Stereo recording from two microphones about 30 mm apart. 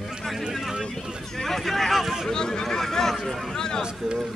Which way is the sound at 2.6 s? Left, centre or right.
Centre.